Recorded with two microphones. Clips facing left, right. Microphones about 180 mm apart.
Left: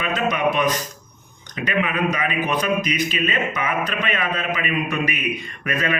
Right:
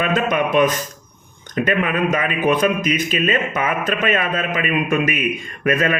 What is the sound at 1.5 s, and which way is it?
A man's voice, 45° right (ahead or behind).